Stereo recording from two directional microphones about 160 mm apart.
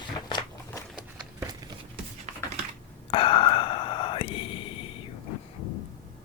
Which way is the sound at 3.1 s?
35° left (ahead or behind).